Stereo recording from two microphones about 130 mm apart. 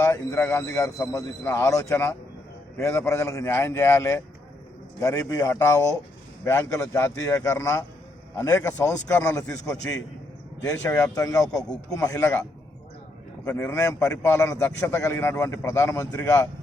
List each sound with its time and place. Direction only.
0.0 s a man's voice: 20° left (ahead or behind)
13.5 s a man's voice: 15° left (ahead or behind)